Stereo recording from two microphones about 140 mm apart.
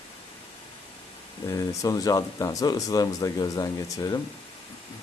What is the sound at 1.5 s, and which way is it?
Speech, 25° left (ahead or behind).